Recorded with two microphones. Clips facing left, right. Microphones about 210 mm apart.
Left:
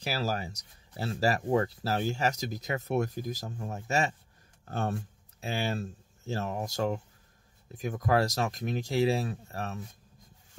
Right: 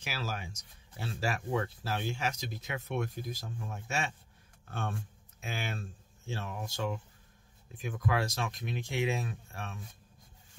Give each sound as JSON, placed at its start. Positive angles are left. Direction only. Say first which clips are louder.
{"t": 0.0, "sound": "speech", "louder": "left 7 dB", "side_deg": 40}